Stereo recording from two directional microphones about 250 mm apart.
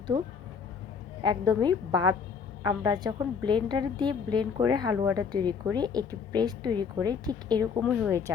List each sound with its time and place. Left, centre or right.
0.1 s a woman's voice: centre
7.8 s a woman's voice: centre